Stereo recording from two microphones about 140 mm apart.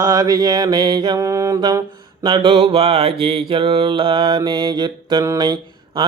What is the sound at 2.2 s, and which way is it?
Mantra, 40° right (ahead or behind).